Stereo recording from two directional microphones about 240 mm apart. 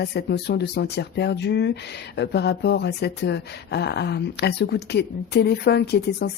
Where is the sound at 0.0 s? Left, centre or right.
Left.